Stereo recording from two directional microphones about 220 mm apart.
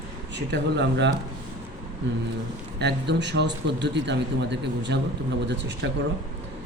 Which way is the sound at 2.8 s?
50° right (ahead or behind).